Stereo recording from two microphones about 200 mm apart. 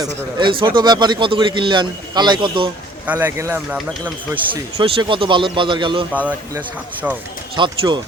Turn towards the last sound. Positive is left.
turn(degrees=-25)  # may be behind; listen again after turning